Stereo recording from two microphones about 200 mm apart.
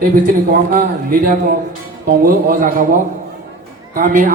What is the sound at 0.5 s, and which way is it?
A man's voice, 45° right (ahead or behind).